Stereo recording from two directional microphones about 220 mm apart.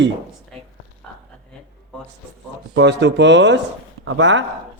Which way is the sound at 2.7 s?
50° right (ahead or behind).